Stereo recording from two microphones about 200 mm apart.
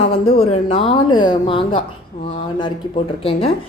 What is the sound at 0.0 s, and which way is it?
Speech, 30° left (ahead or behind).